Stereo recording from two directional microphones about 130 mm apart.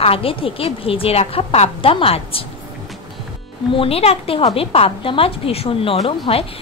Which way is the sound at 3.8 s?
50° left (ahead or behind).